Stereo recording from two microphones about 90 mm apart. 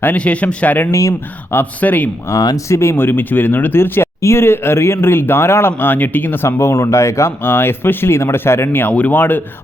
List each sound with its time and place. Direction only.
0.0 s speech: 15° left (ahead or behind)
0.9 s speech: 35° left (ahead or behind)
1.5 s speech: 20° left (ahead or behind)
2.3 s speech: 45° left (ahead or behind)
2.6 s speech: 30° left (ahead or behind)